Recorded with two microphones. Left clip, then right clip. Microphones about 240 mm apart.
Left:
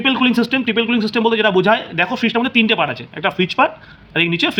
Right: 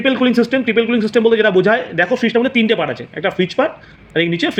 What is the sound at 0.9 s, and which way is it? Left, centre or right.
Speech, centre.